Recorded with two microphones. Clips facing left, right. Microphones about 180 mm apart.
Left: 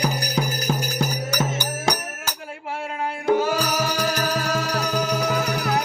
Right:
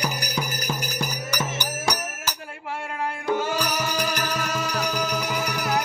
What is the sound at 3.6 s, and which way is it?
Music, 30° left (ahead or behind).